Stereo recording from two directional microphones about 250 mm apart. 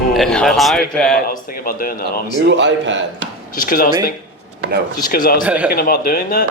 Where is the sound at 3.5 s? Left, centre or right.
Left.